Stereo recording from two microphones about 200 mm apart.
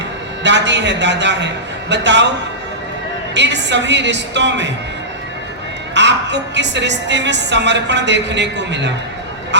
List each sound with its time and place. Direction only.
0.4 s a woman's voice: 60° right (ahead or behind)
3.3 s a woman's voice: 60° right (ahead or behind)
5.9 s a woman's voice: 60° right (ahead or behind)